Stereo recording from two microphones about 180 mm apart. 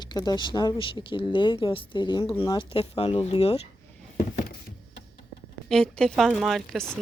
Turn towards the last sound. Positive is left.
turn(degrees=0)  # may be behind; listen again after turning